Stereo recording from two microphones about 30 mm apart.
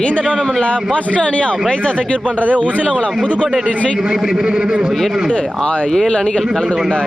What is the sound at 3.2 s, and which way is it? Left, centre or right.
A man's voice, right.